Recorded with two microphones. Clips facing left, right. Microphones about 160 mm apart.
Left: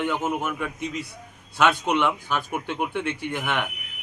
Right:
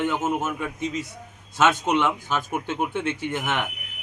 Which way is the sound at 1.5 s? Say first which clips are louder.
Right 1 dB; 20° right (ahead or behind).